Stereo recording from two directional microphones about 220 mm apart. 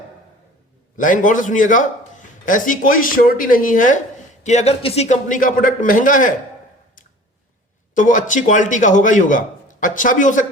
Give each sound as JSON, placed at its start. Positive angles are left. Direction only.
{"t": 0.9, "sound": "a man's voice", "side_deg": 35}
{"t": 7.9, "sound": "a man's voice", "side_deg": 35}